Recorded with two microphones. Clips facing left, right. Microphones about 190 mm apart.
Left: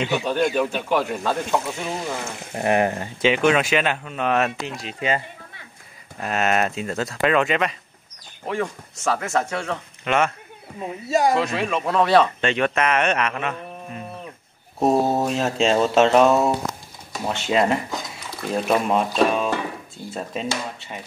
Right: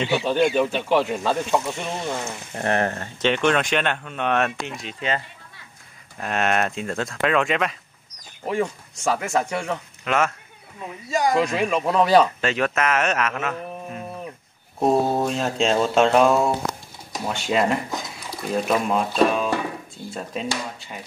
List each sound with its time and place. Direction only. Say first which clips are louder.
0.0 s speech: right 1 dB; centre (ahead or behind)
8.5 s speech: right 2 dB; 10° right (ahead or behind)
10.0 s speech: left 1 dB; centre (ahead or behind)
10.8 s speech: left 4 dB; 35° left (ahead or behind)
11.3 s speech: right 1 dB; centre (ahead or behind)